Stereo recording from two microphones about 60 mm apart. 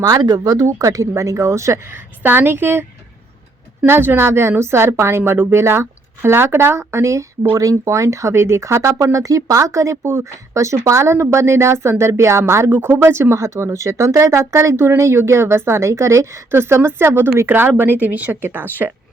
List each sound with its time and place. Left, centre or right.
0.0 s speech: right
1.9 s a woman's voice: right
3.8 s a woman's voice: right
10.0 s a woman's voice: right
12.7 s a woman's voice: right
13.3 s a woman's voice: right